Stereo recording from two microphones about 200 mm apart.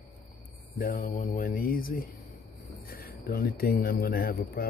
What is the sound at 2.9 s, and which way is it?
Speech, 50° left (ahead or behind).